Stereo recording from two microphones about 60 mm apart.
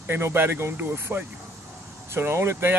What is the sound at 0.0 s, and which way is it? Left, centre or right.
Speech, right.